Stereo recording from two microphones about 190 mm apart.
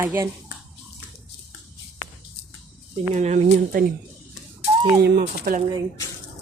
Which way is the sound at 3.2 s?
40° right (ahead or behind).